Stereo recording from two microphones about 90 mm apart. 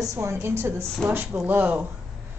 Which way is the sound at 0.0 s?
35° right (ahead or behind).